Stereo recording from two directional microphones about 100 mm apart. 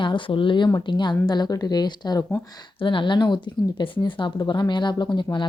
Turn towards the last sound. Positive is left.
turn(degrees=50)  # may be behind; listen again after turning